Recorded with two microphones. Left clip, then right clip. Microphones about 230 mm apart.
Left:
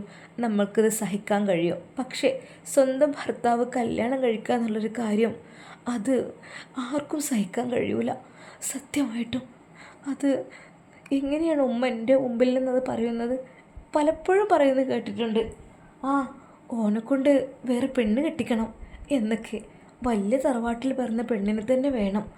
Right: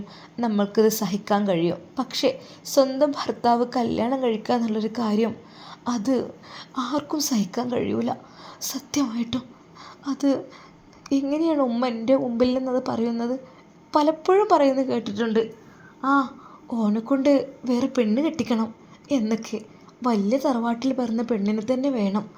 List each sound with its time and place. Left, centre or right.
0.3 s a woman's voice: centre
16.0 s a sound: centre
16.6 s a woman's voice: centre